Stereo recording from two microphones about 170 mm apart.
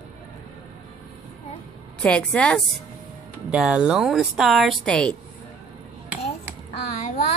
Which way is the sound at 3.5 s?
5° right (ahead or behind).